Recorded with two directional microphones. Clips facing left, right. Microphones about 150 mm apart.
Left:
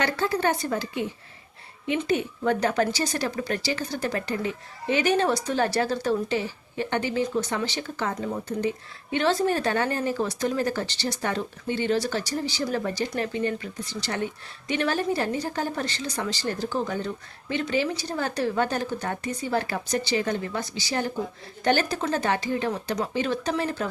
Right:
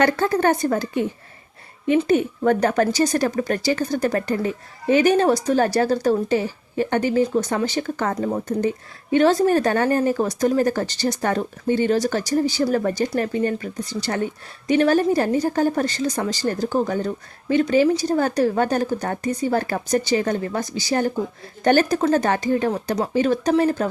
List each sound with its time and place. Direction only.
0.0 s a woman's voice: 50° right (ahead or behind)
2.0 s a woman's voice: 50° right (ahead or behind)